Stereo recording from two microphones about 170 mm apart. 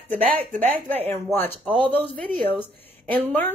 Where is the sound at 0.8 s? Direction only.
10° left (ahead or behind).